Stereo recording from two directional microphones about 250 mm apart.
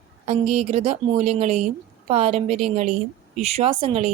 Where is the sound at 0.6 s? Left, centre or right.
Right.